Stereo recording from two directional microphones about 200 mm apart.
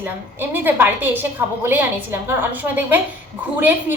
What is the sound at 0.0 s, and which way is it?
A woman's voice, 10° right (ahead or behind).